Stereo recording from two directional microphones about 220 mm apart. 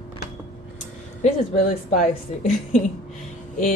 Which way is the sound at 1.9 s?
35° left (ahead or behind).